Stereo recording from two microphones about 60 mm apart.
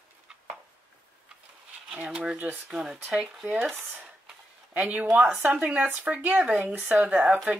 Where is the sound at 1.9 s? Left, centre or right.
Centre.